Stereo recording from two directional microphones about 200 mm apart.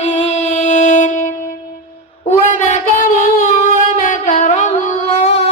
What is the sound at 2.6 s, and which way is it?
Singing, 40° left (ahead or behind).